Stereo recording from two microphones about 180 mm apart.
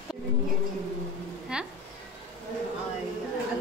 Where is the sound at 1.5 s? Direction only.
5° right (ahead or behind).